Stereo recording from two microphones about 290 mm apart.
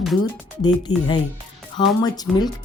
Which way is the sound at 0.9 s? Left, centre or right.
Centre.